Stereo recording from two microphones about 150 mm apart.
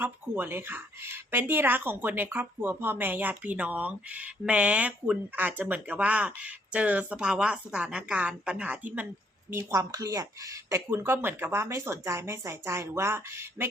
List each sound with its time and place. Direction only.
0.0 s speech: 15° right (ahead or behind)